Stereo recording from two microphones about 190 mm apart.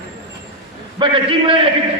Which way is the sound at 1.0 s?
25° right (ahead or behind).